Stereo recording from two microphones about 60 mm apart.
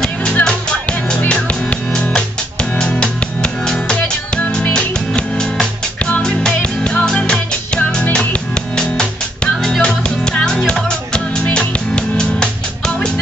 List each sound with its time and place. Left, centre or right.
0.0 s music: centre